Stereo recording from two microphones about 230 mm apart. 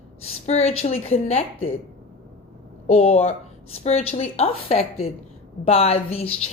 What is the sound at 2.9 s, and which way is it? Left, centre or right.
A woman's voice, left.